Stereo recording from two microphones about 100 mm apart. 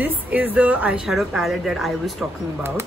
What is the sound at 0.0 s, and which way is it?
Speech, 15° right (ahead or behind).